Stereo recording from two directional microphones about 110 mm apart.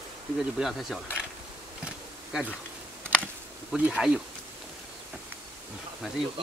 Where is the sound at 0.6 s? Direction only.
Centre (ahead or behind).